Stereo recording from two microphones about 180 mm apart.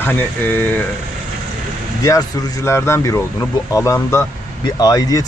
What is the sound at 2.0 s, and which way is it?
Speech, 20° left (ahead or behind).